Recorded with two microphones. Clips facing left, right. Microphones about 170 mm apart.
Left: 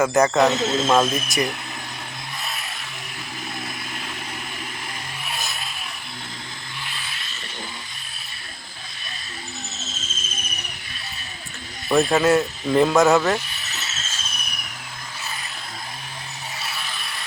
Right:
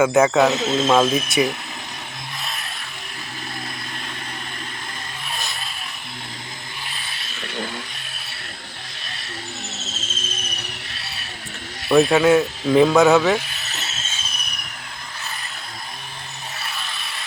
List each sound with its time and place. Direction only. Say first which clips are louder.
0.0 s speech: right 2 dB; centre (ahead or behind)
7.4 s vehicle: right 9 dB; 65° right (ahead or behind)
11.9 s speech: right 3 dB; centre (ahead or behind)